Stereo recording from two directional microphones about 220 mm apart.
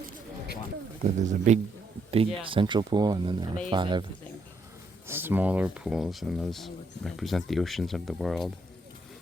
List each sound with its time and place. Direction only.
1.0 s speech: 35° right (ahead or behind)
5.0 s speech: 10° right (ahead or behind)